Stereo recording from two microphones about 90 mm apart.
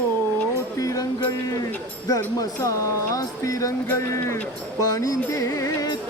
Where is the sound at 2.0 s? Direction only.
40° left (ahead or behind).